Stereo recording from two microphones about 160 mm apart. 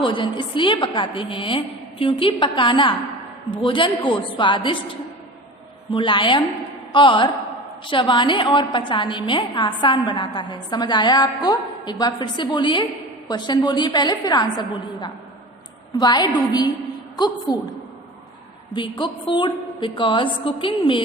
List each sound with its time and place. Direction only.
0.0 s a woman's voice: 30° left (ahead or behind)
5.9 s a woman's voice: 30° left (ahead or behind)